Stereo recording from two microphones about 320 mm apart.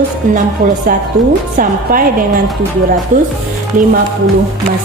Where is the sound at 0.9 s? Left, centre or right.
Right.